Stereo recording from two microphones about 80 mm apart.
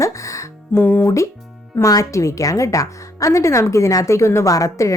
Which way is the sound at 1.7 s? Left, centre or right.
Left.